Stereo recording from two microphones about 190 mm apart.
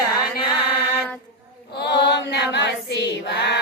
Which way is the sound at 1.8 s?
60° left (ahead or behind).